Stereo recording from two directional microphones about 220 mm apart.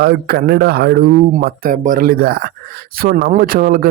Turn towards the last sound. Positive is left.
turn(degrees=-40)  # may be behind; listen again after turning